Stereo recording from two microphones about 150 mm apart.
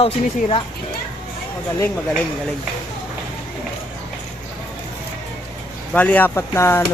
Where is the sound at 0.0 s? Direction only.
40° left (ahead or behind).